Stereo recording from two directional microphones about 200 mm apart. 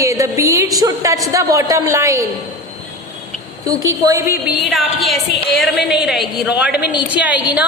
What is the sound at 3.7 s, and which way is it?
Speech, 15° right (ahead or behind).